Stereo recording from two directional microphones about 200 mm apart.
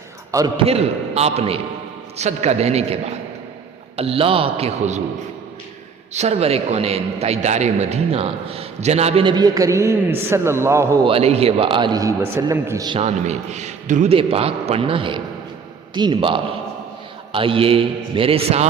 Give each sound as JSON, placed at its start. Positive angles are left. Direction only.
{"t": 0.3, "sound": "a man's voice", "side_deg": -20}
{"t": 6.1, "sound": "a man's voice", "side_deg": -30}
{"t": 11.0, "sound": "a man's voice", "side_deg": -30}
{"t": 13.0, "sound": "a man's voice", "side_deg": -35}